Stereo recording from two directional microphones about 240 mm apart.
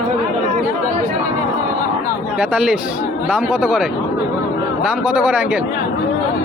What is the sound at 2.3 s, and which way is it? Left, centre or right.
A man's voice, centre.